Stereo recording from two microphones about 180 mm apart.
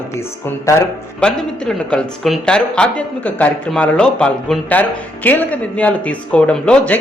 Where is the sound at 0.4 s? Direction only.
15° left (ahead or behind).